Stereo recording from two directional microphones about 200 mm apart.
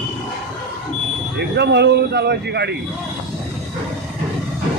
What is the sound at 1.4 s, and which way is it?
Speech, 60° right (ahead or behind).